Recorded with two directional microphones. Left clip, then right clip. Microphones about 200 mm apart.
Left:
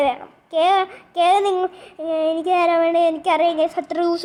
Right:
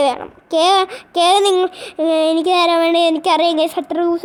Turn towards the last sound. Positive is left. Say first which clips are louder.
# right 3 dB
turn(degrees=-30)  # may be behind; listen again after turning